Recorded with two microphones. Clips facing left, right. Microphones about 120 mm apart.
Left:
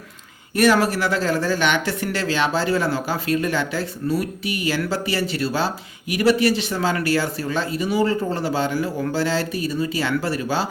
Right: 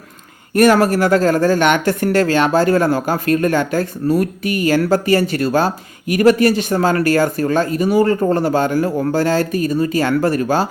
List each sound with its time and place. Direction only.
0.5 s speech: 50° right (ahead or behind)